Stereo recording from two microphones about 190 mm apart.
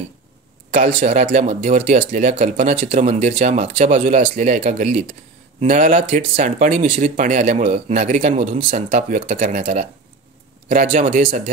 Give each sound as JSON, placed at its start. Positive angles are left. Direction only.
{"t": 0.7, "sound": "speech", "side_deg": -40}